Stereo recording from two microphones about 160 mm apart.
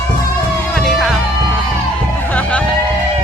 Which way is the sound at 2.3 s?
10° left (ahead or behind).